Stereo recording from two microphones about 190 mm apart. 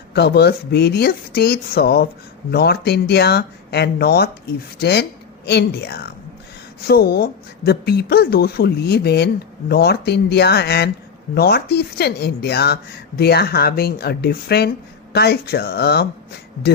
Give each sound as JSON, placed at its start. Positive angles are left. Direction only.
{"t": 0.1, "sound": "speech", "side_deg": 60}